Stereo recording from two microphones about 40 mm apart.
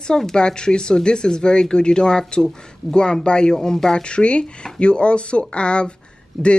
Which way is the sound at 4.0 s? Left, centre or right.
Left.